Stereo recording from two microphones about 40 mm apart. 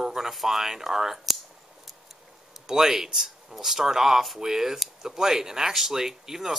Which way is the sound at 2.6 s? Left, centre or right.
Centre.